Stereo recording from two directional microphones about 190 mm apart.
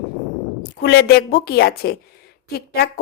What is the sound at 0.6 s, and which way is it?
A woman's voice, 60° left (ahead or behind).